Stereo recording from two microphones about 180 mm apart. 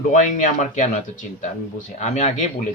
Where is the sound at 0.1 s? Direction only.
45° left (ahead or behind).